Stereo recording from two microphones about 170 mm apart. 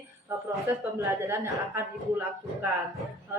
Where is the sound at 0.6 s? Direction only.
15° right (ahead or behind).